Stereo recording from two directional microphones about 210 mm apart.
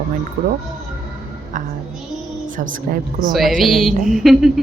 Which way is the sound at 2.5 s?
40° right (ahead or behind).